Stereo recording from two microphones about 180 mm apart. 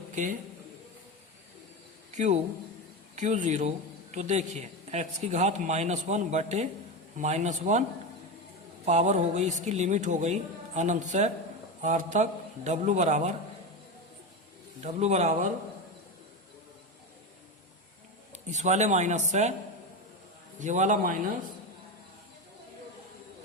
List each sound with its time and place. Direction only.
0.1 s speech: 45° right (ahead or behind)
2.1 s a man's voice: 40° right (ahead or behind)
14.8 s a man's voice: 40° right (ahead or behind)
18.4 s a man's voice: 40° right (ahead or behind)
20.6 s a man's voice: 40° right (ahead or behind)